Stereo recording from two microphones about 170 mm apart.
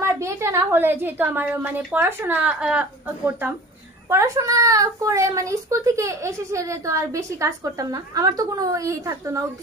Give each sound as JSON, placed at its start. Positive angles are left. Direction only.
{"t": 0.0, "sound": "a woman's voice", "side_deg": -15}